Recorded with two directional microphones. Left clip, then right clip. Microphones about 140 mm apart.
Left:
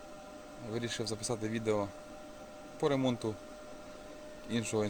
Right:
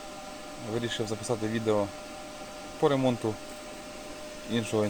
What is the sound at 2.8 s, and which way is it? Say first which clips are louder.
Speech: right 6 dB; 20° left (ahead or behind).